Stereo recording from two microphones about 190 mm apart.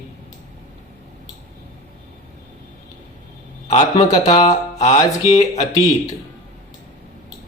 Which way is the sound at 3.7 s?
40° left (ahead or behind).